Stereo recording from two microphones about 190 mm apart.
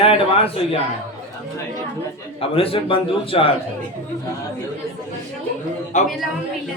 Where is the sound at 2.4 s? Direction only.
30° left (ahead or behind).